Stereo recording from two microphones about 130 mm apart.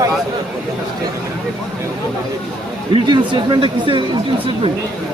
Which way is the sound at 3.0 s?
35° right (ahead or behind).